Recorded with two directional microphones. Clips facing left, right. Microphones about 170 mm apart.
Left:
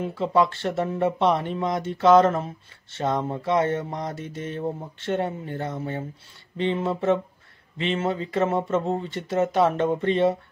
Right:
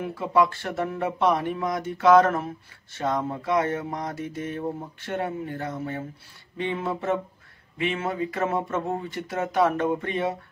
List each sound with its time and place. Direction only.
0.0 s speech: 25° left (ahead or behind)